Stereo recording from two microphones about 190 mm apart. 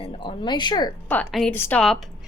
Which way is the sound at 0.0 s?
25° left (ahead or behind).